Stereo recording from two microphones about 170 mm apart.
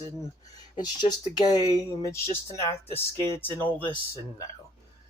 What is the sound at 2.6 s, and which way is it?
Speech, 35° left (ahead or behind).